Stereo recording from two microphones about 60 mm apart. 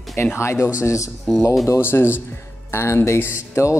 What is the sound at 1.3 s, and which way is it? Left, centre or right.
Speech, centre.